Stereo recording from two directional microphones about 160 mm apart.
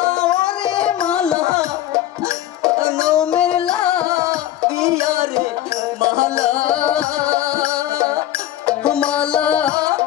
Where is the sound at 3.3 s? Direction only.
5° left (ahead or behind).